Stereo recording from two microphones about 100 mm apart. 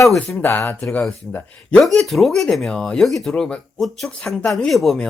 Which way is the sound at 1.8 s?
Centre (ahead or behind).